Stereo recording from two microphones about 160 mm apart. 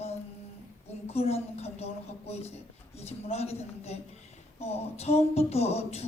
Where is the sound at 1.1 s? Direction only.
40° left (ahead or behind).